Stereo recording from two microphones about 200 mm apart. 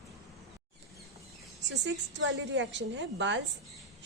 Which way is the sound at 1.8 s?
65° right (ahead or behind).